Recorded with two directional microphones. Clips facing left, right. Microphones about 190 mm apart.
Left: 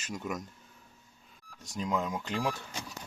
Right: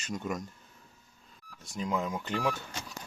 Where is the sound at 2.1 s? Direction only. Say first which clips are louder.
Even; 15° left (ahead or behind).